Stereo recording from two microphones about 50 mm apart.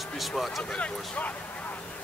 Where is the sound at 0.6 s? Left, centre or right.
Left.